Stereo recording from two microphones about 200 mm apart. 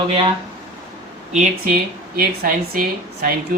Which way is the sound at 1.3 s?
45° right (ahead or behind).